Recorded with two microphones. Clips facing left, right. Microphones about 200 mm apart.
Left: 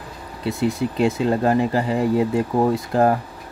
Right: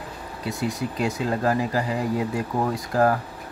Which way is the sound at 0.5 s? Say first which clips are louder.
Left 6 dB; 25° left (ahead or behind).